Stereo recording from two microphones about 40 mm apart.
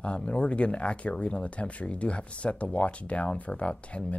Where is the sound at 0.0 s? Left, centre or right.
Left.